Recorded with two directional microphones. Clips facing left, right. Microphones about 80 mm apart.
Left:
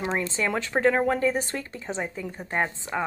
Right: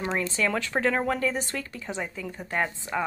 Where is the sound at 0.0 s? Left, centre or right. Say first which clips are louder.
Even; left.